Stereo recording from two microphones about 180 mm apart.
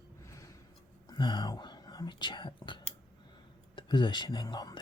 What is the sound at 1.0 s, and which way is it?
Speech, 25° left (ahead or behind).